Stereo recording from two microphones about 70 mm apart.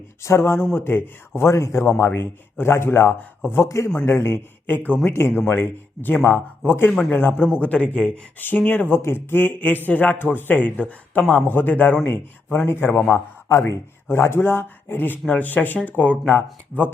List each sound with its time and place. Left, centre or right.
0.2 s speech: left
1.4 s a man's voice: left
2.0 s speech: left; by 8.2 s centre
8.4 s speech: left